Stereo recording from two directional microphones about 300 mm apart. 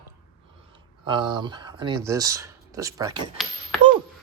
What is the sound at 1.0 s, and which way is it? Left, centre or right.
Speech, centre.